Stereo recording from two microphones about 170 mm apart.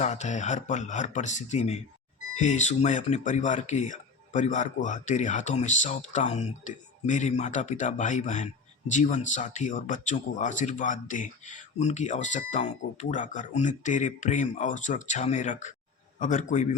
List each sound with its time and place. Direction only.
0.0 s speech: 45° left (ahead or behind)